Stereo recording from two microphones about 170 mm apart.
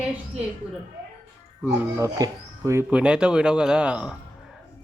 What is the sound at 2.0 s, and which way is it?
Speech, 20° right (ahead or behind).